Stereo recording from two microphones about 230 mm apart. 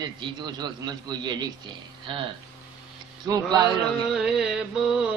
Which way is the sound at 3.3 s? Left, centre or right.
Centre.